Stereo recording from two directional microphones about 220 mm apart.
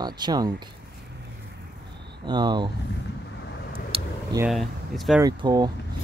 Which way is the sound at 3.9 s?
25° right (ahead or behind).